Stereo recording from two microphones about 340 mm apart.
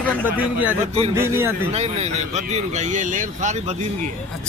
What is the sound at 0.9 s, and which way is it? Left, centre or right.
Speech, centre.